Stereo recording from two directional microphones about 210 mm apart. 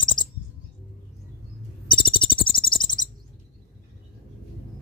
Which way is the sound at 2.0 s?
25° left (ahead or behind).